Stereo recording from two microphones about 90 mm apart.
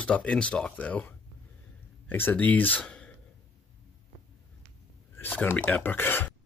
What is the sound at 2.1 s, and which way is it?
Speech, 20° left (ahead or behind).